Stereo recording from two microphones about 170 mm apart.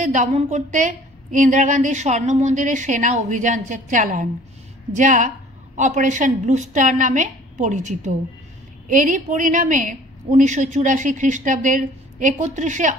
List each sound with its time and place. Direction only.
0.0 s a woman's voice: 45° right (ahead or behind)